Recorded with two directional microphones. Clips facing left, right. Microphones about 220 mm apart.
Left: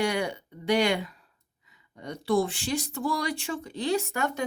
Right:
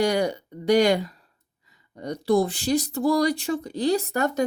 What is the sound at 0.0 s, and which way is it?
Speech, 40° right (ahead or behind).